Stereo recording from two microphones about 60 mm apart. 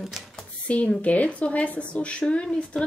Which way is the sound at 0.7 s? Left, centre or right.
Left.